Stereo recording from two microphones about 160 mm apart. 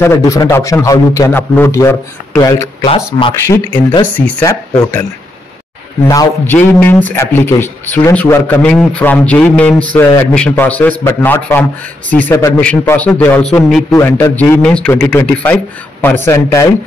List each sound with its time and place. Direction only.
0.0 s a man's voice: 20° left (ahead or behind)
6.0 s a man's voice: 15° left (ahead or behind)
13.9 s a man's voice: 15° left (ahead or behind)